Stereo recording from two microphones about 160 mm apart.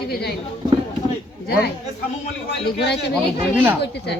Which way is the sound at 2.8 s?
90° left.